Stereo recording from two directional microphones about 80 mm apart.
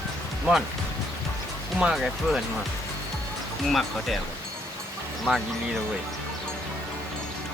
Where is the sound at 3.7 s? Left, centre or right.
Centre.